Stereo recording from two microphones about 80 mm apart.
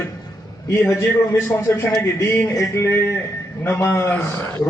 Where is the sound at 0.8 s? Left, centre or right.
Left.